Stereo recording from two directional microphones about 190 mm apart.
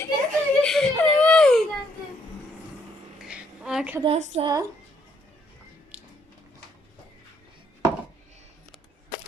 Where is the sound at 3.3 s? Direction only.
5° right (ahead or behind).